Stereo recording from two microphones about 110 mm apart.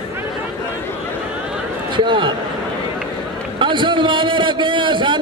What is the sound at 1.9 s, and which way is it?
Speech, 45° right (ahead or behind).